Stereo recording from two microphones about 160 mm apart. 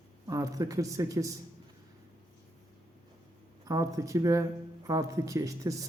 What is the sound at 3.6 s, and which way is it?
Speech, 20° right (ahead or behind).